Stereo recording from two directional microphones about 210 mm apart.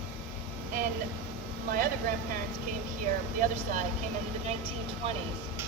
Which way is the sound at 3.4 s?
40° right (ahead or behind).